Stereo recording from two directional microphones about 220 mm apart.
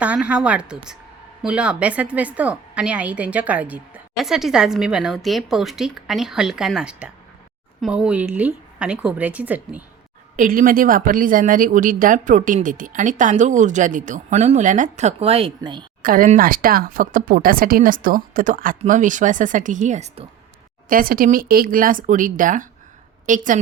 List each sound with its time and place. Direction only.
0.0 s a woman's voice: 5° right (ahead or behind)
10.3 s speech: 35° right (ahead or behind); by 15.9 s 20° right (ahead or behind)
16.0 s speech: 40° right (ahead or behind)